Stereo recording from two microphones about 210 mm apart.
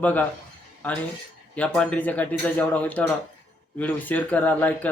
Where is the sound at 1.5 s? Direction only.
5° left (ahead or behind).